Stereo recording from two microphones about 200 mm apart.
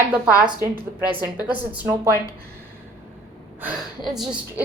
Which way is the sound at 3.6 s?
Centre (ahead or behind).